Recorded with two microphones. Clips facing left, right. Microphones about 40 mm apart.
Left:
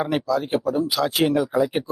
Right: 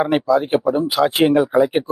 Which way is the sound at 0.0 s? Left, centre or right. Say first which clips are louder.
Right 6 dB; right.